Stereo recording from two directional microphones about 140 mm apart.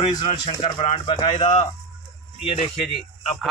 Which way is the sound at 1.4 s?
55° left (ahead or behind).